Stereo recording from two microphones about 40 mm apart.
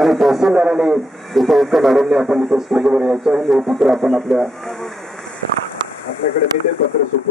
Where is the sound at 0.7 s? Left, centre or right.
Centre.